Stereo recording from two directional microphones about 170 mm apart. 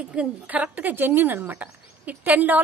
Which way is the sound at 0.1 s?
5° right (ahead or behind).